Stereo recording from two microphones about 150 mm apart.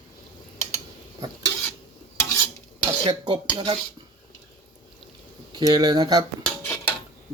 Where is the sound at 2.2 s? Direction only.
20° left (ahead or behind).